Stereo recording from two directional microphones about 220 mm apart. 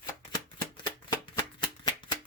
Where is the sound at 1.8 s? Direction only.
20° left (ahead or behind).